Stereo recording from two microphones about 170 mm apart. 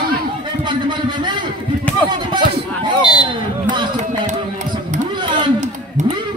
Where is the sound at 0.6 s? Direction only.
25° right (ahead or behind).